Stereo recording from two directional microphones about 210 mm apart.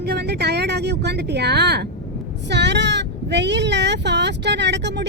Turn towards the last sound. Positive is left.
turn(degrees=-55)  # may be behind; listen again after turning